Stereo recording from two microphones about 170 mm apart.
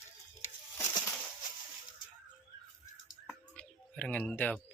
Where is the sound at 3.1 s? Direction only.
5° left (ahead or behind).